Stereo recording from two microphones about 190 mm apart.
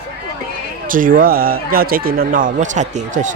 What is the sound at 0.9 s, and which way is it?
Speech, 45° right (ahead or behind).